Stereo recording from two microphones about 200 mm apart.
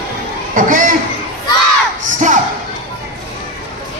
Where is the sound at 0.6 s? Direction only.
40° right (ahead or behind).